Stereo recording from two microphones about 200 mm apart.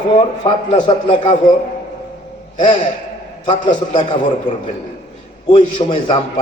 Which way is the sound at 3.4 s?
25° left (ahead or behind).